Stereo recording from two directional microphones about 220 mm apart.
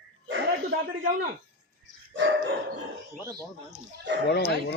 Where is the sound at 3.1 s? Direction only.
15° right (ahead or behind).